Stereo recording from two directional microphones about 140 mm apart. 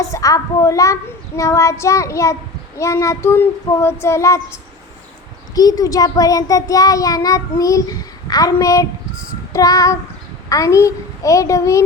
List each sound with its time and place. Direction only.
0.0 s child singing: 25° left (ahead or behind)
5.5 s child singing: 25° left (ahead or behind)